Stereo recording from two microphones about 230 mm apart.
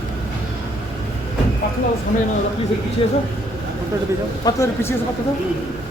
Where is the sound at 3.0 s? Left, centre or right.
Left.